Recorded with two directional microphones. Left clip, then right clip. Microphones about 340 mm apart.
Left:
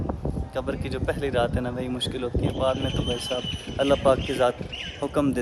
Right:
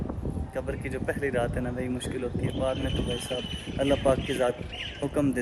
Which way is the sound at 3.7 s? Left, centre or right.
Centre.